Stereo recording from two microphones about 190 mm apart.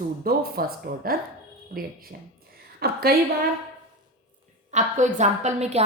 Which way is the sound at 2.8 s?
55° right (ahead or behind).